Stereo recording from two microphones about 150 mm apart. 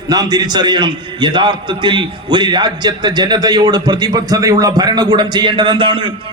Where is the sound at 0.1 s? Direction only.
25° right (ahead or behind).